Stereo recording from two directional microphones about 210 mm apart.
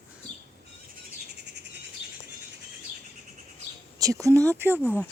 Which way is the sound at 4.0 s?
15° right (ahead or behind).